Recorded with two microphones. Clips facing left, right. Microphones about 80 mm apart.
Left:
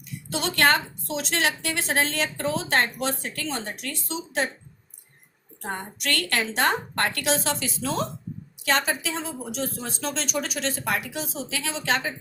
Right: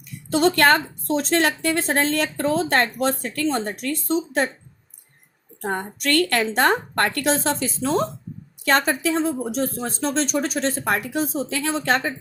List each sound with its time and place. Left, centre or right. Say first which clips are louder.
0.3 s speech: right 6 dB; right
5.6 s speech: right 6 dB; right